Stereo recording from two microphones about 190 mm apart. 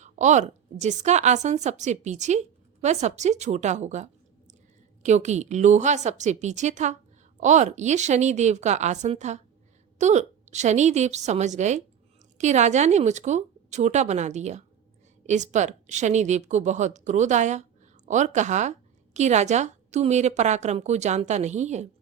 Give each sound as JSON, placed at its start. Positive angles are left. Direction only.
{"t": 0.0, "sound": "a woman's voice", "side_deg": -40}